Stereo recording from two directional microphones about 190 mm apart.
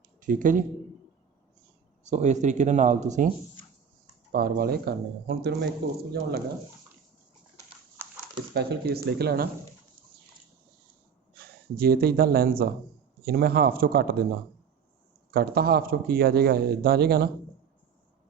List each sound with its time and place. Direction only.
0.2 s speech: 45° right (ahead or behind)
2.0 s speech: 40° right (ahead or behind)
4.3 s speech: 50° right (ahead or behind)
8.5 s speech: 60° right (ahead or behind)
11.3 s a man's voice: 55° right (ahead or behind)
15.3 s a man's voice: 55° right (ahead or behind)